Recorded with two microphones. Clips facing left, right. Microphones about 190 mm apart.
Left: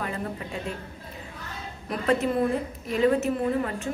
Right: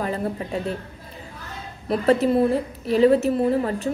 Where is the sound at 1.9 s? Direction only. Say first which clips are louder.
Right 6 dB; 35° right (ahead or behind).